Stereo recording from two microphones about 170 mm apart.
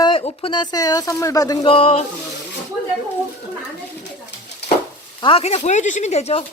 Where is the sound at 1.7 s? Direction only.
35° left (ahead or behind).